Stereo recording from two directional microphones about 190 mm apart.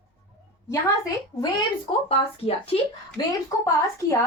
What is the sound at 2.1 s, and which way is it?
Speech, 30° left (ahead or behind).